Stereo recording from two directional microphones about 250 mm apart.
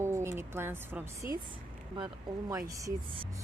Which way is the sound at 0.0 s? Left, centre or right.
Centre.